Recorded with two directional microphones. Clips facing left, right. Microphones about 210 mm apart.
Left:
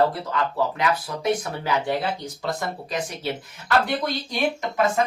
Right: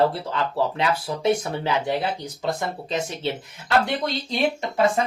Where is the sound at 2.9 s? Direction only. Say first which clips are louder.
Right 2 dB; 25° right (ahead or behind).